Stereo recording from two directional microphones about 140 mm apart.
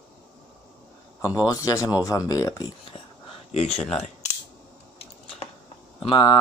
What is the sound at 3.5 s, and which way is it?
Speech, 50° left (ahead or behind).